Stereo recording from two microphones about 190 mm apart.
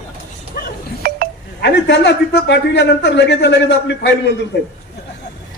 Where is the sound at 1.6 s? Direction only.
65° left (ahead or behind).